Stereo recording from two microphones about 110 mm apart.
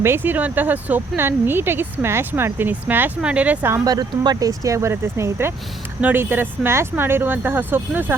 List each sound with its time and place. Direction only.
0.0 s speech: 20° right (ahead or behind)
3.8 s speech: 40° right (ahead or behind); by 8.1 s 20° right (ahead or behind)